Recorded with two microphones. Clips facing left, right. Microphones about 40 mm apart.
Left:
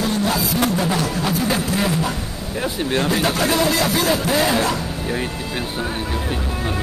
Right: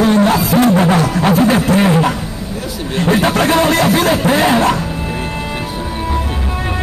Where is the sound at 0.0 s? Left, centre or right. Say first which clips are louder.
Right 9 dB; right.